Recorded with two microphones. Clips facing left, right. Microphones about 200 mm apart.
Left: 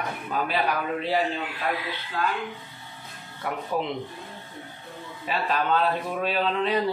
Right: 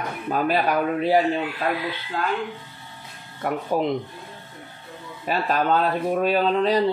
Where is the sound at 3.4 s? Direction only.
45° right (ahead or behind).